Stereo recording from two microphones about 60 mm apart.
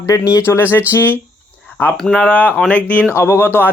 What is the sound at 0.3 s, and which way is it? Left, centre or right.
Speech, left.